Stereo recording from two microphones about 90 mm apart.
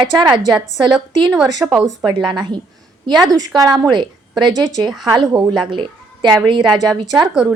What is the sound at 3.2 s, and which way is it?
Speech, 45° right (ahead or behind).